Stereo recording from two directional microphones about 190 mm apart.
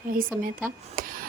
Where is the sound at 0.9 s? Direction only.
45° right (ahead or behind).